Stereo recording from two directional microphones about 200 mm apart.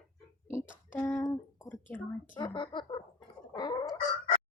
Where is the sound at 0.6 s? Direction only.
40° left (ahead or behind).